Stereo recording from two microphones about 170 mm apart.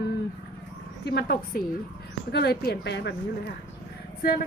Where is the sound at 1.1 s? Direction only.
70° left (ahead or behind); by 3.1 s 85° left.